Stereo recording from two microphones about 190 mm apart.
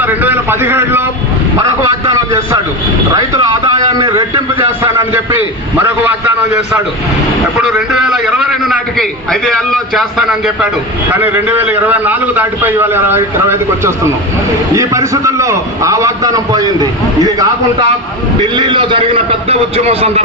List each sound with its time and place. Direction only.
0.0 s a man's voice: 10° right (ahead or behind)
4.8 s a man's voice: 10° right (ahead or behind)
7.6 s a man's voice: 5° right (ahead or behind); by 20.2 s 30° right (ahead or behind)